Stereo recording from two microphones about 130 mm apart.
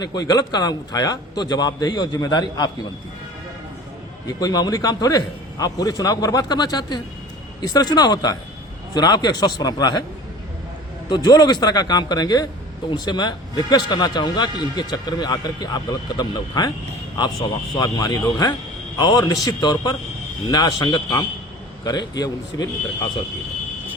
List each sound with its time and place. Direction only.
0.0 s a man's voice: 30° left (ahead or behind)
4.3 s a man's voice: 30° left (ahead or behind)
11.1 s a man's voice: 35° left (ahead or behind)
17.7 s a man's voice: 30° left (ahead or behind)